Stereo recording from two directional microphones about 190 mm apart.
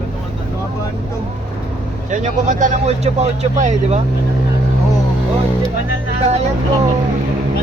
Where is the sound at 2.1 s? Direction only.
40° right (ahead or behind).